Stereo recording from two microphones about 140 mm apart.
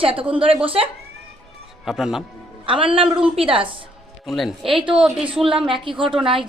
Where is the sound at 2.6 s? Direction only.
40° right (ahead or behind).